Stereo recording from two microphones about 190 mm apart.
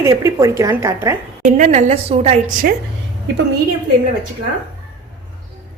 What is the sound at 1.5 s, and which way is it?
Speech, 40° right (ahead or behind).